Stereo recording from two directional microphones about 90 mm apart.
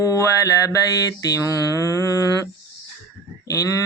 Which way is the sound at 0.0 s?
40° left (ahead or behind).